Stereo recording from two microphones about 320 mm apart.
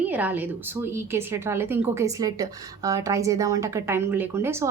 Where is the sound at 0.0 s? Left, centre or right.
Centre.